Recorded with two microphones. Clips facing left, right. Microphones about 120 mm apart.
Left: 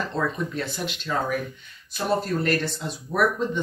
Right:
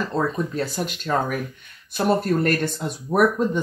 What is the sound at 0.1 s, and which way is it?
Speech, 40° right (ahead or behind).